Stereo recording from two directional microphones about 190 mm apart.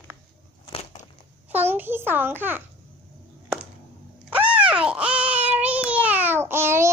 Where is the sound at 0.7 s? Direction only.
35° left (ahead or behind).